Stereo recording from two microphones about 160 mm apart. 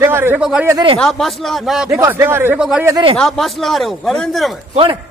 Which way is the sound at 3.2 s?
Centre (ahead or behind).